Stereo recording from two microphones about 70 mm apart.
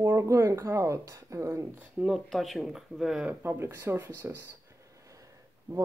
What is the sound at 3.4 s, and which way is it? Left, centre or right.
Speech, right.